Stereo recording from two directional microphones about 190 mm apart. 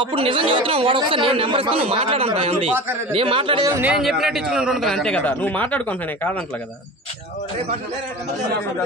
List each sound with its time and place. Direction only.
0.0 s speech: 30° right (ahead or behind)
3.7 s a man's voice: 5° right (ahead or behind)